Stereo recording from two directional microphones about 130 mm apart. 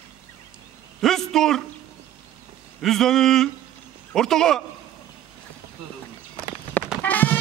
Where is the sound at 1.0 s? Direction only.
5° left (ahead or behind).